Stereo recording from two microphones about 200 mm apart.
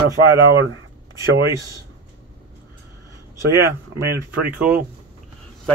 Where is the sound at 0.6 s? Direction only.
75° right (ahead or behind).